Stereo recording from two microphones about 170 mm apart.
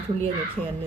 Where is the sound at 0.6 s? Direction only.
5° left (ahead or behind).